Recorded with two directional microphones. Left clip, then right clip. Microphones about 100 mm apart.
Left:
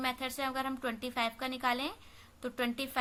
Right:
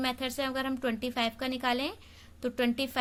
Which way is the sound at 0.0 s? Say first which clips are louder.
Right 3 dB; 25° right (ahead or behind).